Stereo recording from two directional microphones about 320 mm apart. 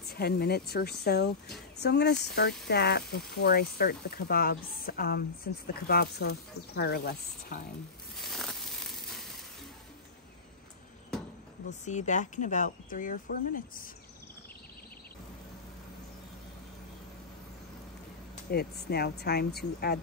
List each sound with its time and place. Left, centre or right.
0.0 s speech: left
8.2 s a sound: centre
11.8 s speech: left
18.3 s speech: left